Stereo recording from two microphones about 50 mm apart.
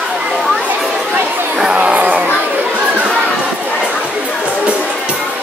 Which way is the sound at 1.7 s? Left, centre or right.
Right.